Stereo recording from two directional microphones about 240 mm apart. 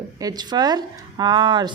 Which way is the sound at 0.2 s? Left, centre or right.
Centre.